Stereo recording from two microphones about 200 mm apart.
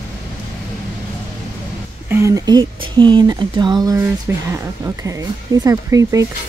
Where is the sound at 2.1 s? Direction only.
15° right (ahead or behind).